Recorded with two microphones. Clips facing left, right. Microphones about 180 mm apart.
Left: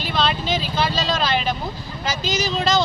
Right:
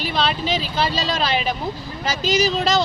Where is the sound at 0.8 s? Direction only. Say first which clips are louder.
Even; 35° right (ahead or behind).